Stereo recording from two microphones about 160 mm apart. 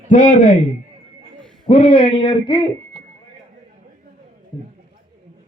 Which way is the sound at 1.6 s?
35° left (ahead or behind).